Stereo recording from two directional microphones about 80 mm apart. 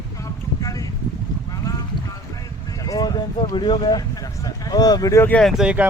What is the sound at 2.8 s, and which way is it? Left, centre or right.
Speech, left.